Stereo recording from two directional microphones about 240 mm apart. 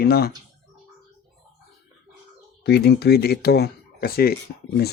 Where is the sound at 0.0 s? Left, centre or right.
Left.